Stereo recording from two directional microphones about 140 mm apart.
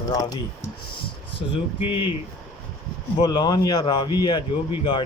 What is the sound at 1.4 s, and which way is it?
Speech, 40° left (ahead or behind).